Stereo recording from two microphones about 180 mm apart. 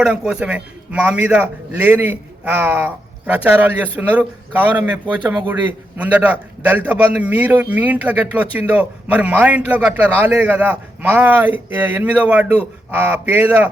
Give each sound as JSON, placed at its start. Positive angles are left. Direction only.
{"t": 0.0, "sound": "a man's voice", "side_deg": -5}